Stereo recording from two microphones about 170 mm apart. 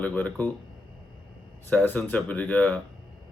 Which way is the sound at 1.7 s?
10° left (ahead or behind).